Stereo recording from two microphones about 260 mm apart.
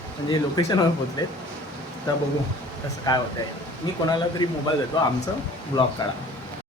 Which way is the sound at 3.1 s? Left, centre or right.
Centre.